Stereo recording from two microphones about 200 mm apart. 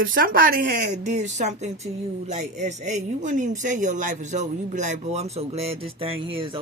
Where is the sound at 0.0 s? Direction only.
45° right (ahead or behind).